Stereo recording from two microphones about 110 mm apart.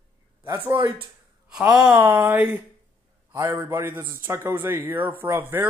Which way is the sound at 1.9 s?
25° right (ahead or behind).